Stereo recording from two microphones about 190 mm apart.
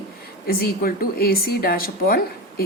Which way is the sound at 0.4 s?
55° left (ahead or behind).